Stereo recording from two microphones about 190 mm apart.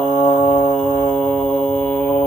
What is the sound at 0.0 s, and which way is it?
Mantra, 5° left (ahead or behind).